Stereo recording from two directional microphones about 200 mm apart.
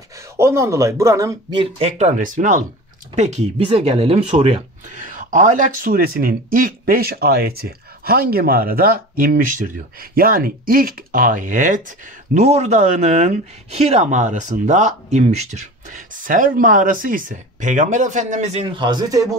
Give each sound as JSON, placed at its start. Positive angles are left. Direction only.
{"t": 0.4, "sound": "speech", "side_deg": -15}
{"t": 5.0, "sound": "speech", "side_deg": -40}